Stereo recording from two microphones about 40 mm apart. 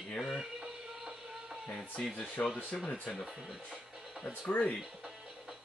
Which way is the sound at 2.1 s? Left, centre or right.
Left.